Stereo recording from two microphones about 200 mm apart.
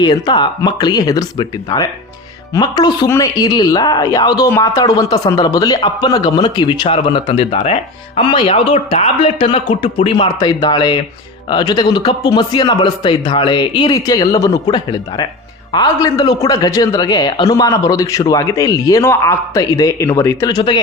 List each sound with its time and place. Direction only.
0.0 s speech: 20° left (ahead or behind)